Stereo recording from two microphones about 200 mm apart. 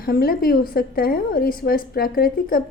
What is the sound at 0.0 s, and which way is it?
A woman's voice, 50° left (ahead or behind).